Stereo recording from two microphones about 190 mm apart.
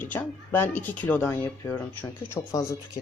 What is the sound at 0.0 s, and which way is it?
Speech, 10° left (ahead or behind).